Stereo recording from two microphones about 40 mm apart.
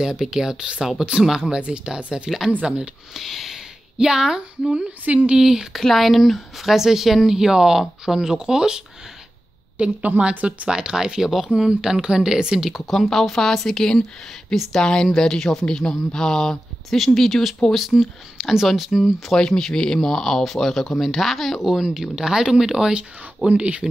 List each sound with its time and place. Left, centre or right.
0.0 s speech: centre
2.0 s speech: right
3.2 s a sound: centre
4.6 s a woman's voice: right
5.3 s speech: centre
5.8 s a woman's voice: centre
9.8 s a woman's voice: right
10.7 s speech: centre
12.7 s a woman's voice: centre
19.3 s speech: centre
22.9 s speech: right